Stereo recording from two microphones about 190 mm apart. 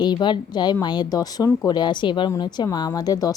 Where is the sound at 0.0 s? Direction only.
25° left (ahead or behind).